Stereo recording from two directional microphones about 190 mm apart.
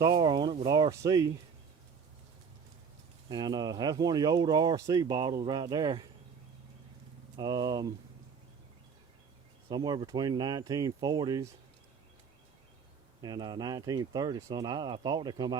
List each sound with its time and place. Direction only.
0.2 s speech: 25° right (ahead or behind)
3.2 s speech: 20° right (ahead or behind)
7.3 s speech: 20° right (ahead or behind)
9.6 s speech: 20° right (ahead or behind)
13.2 s speech: 20° right (ahead or behind)